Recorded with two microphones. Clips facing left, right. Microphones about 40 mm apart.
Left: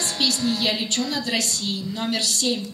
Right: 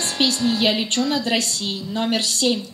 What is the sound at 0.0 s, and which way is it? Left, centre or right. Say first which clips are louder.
A woman's voice: right 3 dB; right.